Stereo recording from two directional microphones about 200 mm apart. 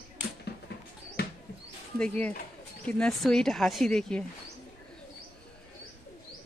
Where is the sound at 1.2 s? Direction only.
50° left (ahead or behind).